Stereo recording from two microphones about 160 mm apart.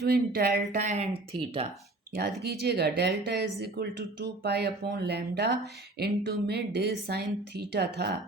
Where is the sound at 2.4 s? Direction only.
90° right.